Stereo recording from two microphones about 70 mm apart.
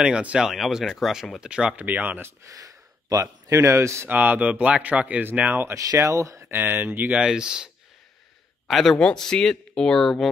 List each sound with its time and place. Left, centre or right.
0.0 s speech: centre
0.5 s speech: centre
1.9 s speech: right
2.5 s speech: right
4.1 s speech: right
5.9 s speech: right
6.5 s speech: right
7.2 s speech: centre
8.6 s speech: centre